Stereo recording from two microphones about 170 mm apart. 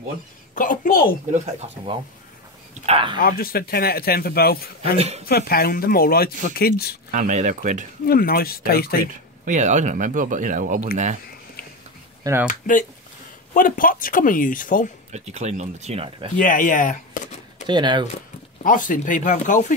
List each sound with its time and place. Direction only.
0.6 s a man's voice: 55° left (ahead or behind)
1.3 s speech: 40° right (ahead or behind)
3.2 s a man's voice: 60° left (ahead or behind)
4.9 s speech: 40° right (ahead or behind)
5.2 s a man's voice: 65° left (ahead or behind)
7.1 s speech: 45° right (ahead or behind)
8.1 s a man's voice: 60° left (ahead or behind)
9.4 s speech: 45° right (ahead or behind)
12.2 s speech: 15° right (ahead or behind)
12.4 s speech: 50° left (ahead or behind)
15.1 s speech: 40° right (ahead or behind)
16.3 s speech: 50° left (ahead or behind)
17.6 s speech: 25° right (ahead or behind)
18.6 s speech: 50° left (ahead or behind)